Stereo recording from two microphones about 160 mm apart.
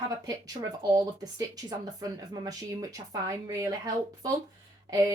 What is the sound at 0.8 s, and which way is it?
A woman's voice, 25° right (ahead or behind).